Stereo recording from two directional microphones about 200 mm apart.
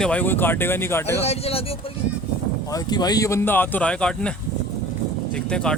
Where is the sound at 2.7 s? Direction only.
20° left (ahead or behind).